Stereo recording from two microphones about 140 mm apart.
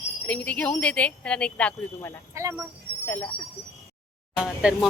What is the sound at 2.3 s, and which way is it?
Speech, 20° right (ahead or behind).